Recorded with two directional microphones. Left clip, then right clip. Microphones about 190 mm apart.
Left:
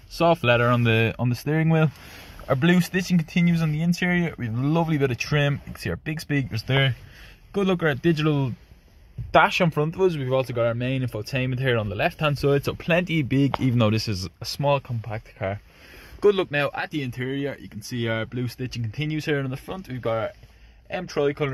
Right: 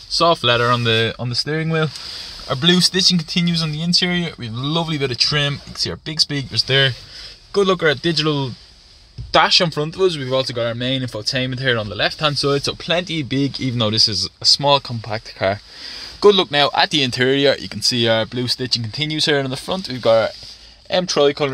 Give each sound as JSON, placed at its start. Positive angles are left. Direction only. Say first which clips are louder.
{"t": 0.2, "sound": "speech", "louder": "right 4 dB", "side_deg": 5}
{"t": 2.7, "sound": "speech", "louder": "right 9 dB", "side_deg": 5}
{"t": 10.0, "sound": "speech", "louder": "right 6 dB", "side_deg": 5}
{"t": 14.6, "sound": "speech", "louder": "right 7 dB", "side_deg": -10}
{"t": 16.7, "sound": "speech", "louder": "right 13 dB", "side_deg": -45}